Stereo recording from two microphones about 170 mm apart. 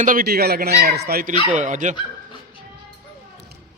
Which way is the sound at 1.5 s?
45° right (ahead or behind).